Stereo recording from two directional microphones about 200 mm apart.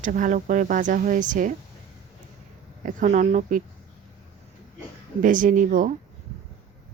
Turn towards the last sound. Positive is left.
turn(degrees=-40)  # may be behind; listen again after turning